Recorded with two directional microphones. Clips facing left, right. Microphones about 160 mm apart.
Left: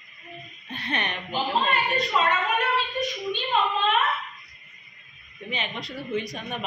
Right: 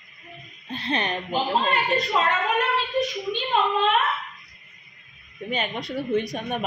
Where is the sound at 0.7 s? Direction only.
30° right (ahead or behind).